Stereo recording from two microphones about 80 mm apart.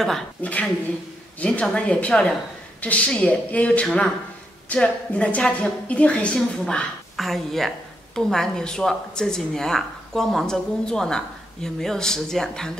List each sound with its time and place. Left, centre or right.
0.4 s a woman's voice: centre